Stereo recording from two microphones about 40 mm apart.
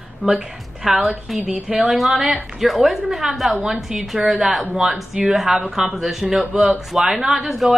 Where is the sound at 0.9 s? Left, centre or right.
Centre.